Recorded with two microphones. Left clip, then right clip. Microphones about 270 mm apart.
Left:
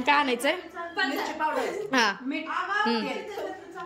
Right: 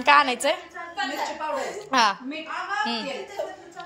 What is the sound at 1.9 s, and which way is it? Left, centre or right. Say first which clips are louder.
A woman's voice: right 6 dB; centre.